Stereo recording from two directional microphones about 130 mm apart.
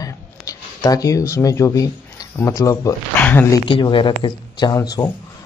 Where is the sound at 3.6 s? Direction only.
40° left (ahead or behind).